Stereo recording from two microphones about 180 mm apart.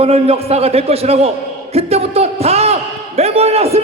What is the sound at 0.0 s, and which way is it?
A man's voice, 35° right (ahead or behind).